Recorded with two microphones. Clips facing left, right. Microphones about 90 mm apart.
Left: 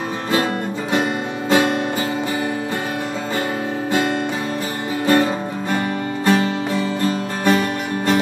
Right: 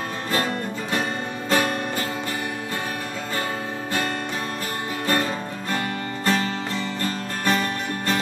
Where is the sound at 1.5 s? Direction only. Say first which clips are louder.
Left 5 dB; 15° left (ahead or behind).